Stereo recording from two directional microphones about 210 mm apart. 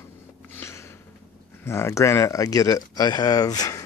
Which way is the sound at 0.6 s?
10° left (ahead or behind).